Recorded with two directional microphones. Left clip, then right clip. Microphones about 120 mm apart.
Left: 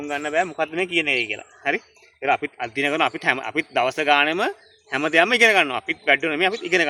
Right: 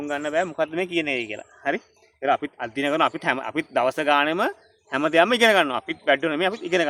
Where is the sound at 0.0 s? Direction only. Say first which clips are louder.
Left 1 dB; 35° right (ahead or behind).